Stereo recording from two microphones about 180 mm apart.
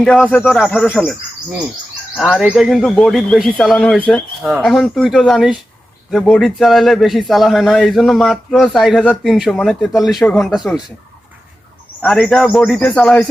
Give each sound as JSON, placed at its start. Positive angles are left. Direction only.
{"t": 0.0, "sound": "speech", "side_deg": 5}
{"t": 0.6, "sound": "a man's voice", "side_deg": 0}
{"t": 2.1, "sound": "a man's voice", "side_deg": 0}
{"t": 12.0, "sound": "a man's voice", "side_deg": 0}